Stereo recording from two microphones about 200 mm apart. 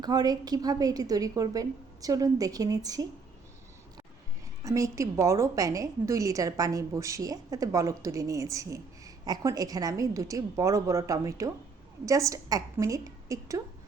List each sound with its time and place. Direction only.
0.0 s a woman's voice: 20° right (ahead or behind)
4.6 s a woman's voice: 15° right (ahead or behind)